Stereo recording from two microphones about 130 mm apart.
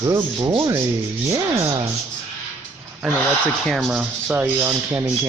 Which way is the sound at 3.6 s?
Centre (ahead or behind).